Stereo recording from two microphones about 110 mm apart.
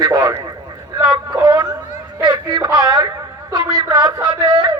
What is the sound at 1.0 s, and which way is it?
Speech, 10° right (ahead or behind).